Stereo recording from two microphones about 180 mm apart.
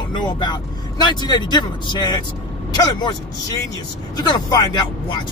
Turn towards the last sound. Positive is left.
turn(degrees=25)  # may be behind; listen again after turning